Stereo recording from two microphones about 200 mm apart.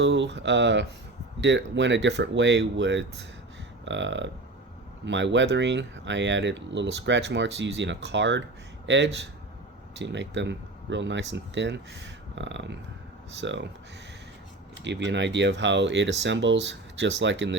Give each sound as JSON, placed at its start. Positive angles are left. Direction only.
{"t": 0.0, "sound": "speech", "side_deg": -60}
{"t": 14.8, "sound": "speech", "side_deg": -60}